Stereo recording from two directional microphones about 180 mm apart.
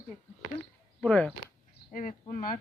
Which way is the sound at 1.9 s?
45° left (ahead or behind).